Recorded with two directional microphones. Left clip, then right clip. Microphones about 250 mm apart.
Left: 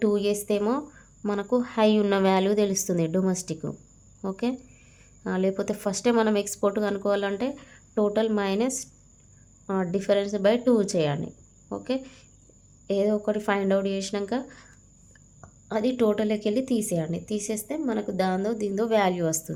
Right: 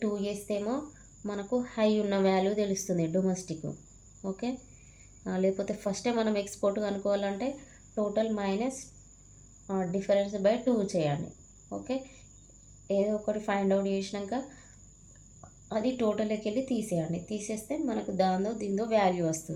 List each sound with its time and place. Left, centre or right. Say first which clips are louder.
0.0 s a woman's voice: left 9 dB; left